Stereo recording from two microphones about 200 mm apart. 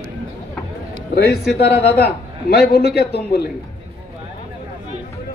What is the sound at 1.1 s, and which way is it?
A man's voice, 55° left (ahead or behind).